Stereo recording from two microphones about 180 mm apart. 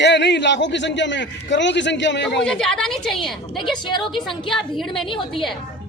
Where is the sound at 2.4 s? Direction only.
5° left (ahead or behind).